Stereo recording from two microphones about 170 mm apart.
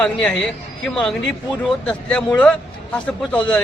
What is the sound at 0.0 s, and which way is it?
A man's voice, 5° left (ahead or behind).